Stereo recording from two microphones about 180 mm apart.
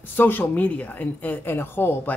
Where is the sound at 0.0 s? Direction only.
10° left (ahead or behind).